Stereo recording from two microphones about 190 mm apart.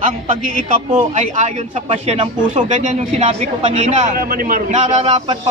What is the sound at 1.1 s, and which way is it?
A man's voice, 40° right (ahead or behind).